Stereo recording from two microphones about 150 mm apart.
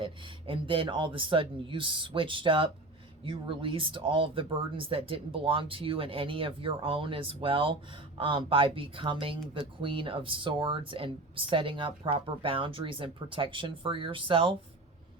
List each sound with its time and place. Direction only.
0.0 s speech: 35° right (ahead or behind)